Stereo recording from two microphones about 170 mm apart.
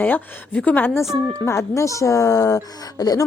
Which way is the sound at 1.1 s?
Centre (ahead or behind).